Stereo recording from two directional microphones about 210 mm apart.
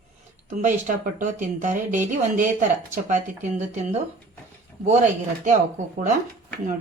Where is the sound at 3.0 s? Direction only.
35° right (ahead or behind).